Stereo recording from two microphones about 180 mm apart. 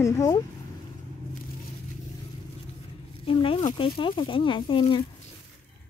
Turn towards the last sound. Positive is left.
turn(degrees=30)  # may be behind; listen again after turning